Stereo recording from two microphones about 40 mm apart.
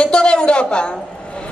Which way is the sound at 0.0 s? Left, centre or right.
Left.